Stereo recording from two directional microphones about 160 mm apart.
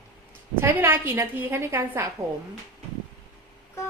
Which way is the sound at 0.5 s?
15° right (ahead or behind).